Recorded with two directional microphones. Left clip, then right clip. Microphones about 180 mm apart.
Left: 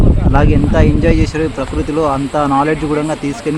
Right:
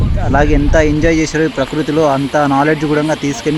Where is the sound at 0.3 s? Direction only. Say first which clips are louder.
Right 3 dB; 15° right (ahead or behind).